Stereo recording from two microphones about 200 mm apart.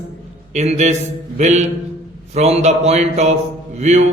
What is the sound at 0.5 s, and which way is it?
Speech, 35° right (ahead or behind).